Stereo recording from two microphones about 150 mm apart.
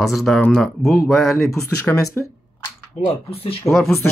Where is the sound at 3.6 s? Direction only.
Centre (ahead or behind).